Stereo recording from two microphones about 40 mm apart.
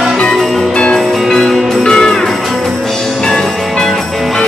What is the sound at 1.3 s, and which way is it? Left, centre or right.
Music, centre.